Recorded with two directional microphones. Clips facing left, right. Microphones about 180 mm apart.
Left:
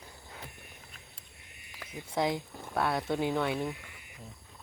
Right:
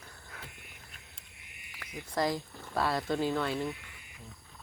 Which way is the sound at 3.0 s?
20° left (ahead or behind).